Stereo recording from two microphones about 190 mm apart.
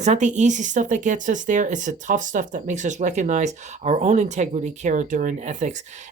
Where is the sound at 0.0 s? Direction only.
40° right (ahead or behind).